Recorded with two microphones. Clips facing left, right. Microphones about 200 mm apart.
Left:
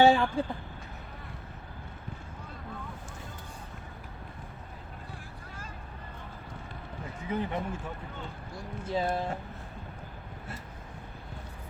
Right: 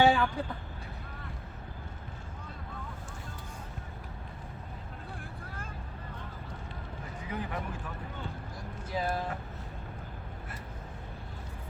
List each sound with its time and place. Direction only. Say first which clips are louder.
0.0 s a sound: left 3 dB; 25° left (ahead or behind)
7.2 s speech: left 5 dB; 25° left (ahead or behind)
8.9 s speech: left 3 dB; 25° left (ahead or behind)